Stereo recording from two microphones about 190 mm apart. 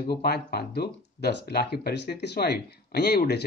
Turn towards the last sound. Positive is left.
turn(degrees=60)  # may be behind; listen again after turning